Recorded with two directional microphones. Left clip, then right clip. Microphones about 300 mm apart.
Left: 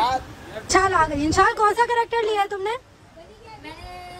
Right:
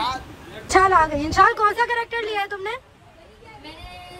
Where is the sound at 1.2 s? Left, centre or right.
Centre.